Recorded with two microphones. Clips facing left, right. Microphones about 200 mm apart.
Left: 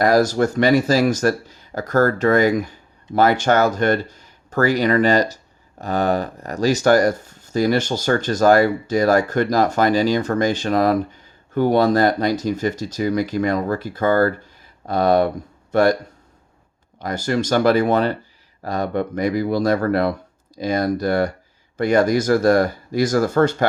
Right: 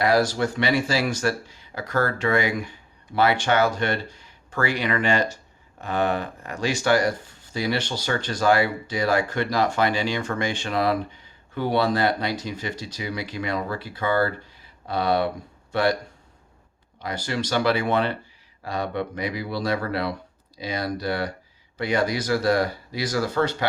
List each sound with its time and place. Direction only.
0.0 s speech: 45° left (ahead or behind)
17.0 s speech: 45° left (ahead or behind)